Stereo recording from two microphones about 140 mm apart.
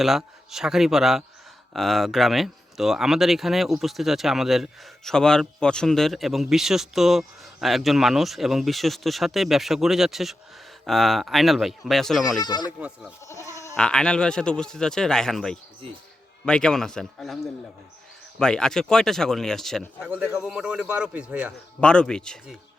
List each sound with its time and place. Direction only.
0.0 s speech: 5° right (ahead or behind)
12.4 s speech: 30° left (ahead or behind)
12.8 s a man's voice: 10° right (ahead or behind)
13.2 s goat: 20° left (ahead or behind)
13.7 s speech: 5° left (ahead or behind)
20.0 s a man's voice: 10° right (ahead or behind)
21.8 s speech: 5° left (ahead or behind)